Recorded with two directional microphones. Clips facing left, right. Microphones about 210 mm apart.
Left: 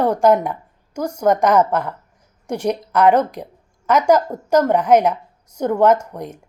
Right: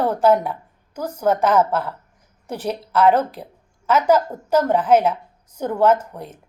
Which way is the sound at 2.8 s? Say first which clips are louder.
Right 1 dB; 5° right (ahead or behind).